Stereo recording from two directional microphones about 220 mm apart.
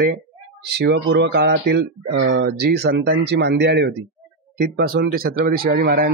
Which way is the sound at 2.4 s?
45° right (ahead or behind).